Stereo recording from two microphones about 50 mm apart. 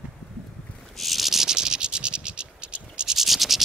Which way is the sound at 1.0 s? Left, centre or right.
Centre.